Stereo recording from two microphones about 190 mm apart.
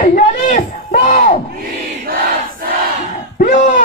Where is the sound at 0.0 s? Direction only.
45° left (ahead or behind).